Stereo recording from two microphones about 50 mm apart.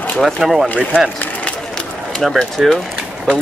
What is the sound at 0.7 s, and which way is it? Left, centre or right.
Speech, centre.